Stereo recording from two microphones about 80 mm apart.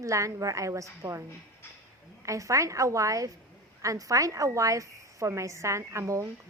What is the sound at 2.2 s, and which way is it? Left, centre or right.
A woman's voice, right.